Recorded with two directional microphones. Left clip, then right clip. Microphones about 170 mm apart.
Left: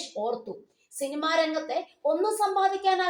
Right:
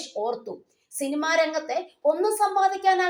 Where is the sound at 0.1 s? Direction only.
45° right (ahead or behind).